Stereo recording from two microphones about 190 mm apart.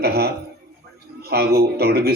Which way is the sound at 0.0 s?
55° right (ahead or behind).